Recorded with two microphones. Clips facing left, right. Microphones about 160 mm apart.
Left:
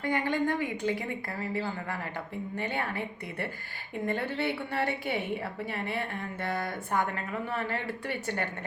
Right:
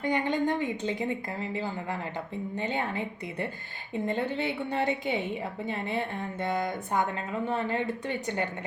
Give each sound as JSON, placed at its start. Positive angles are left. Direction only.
{"t": 0.0, "sound": "a woman's voice", "side_deg": -20}